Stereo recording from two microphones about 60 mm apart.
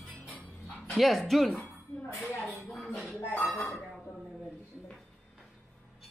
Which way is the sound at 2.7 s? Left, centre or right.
Centre.